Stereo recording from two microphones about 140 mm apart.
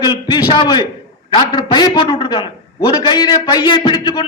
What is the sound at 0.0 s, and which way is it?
A man's voice, 30° left (ahead or behind).